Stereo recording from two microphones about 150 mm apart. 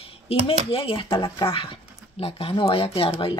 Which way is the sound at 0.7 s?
40° left (ahead or behind).